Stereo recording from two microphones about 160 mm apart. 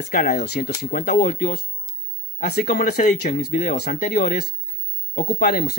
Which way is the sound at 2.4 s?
75° left (ahead or behind).